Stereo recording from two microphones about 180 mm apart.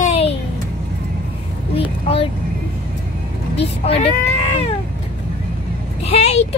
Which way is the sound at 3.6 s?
35° left (ahead or behind).